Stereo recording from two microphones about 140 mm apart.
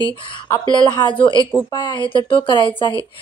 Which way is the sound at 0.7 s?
35° left (ahead or behind).